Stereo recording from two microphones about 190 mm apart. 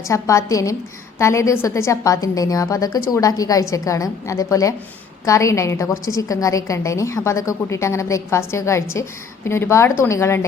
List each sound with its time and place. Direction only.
0.1 s a woman's voice: 15° left (ahead or behind)